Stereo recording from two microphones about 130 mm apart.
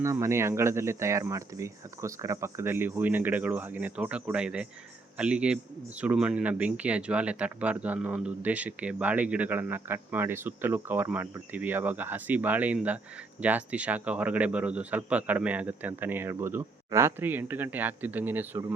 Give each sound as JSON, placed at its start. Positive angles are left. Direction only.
{"t": 0.0, "sound": "speech", "side_deg": -20}